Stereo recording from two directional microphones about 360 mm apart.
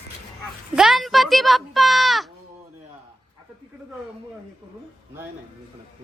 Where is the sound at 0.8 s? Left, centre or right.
Centre.